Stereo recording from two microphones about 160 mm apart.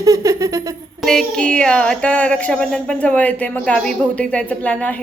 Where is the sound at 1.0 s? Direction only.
Centre (ahead or behind).